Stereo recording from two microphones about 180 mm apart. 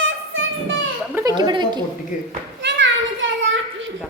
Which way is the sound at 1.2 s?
20° right (ahead or behind).